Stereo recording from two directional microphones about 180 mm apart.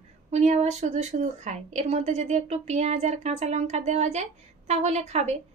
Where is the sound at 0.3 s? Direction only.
40° right (ahead or behind).